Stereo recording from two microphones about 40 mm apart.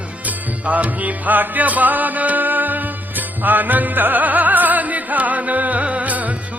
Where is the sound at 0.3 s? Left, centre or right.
Right.